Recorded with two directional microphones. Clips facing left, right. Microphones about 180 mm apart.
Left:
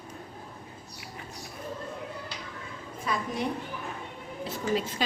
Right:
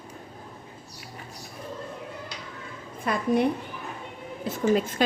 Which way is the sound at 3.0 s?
55° right (ahead or behind).